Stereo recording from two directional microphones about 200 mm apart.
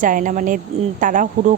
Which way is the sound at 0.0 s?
40° right (ahead or behind).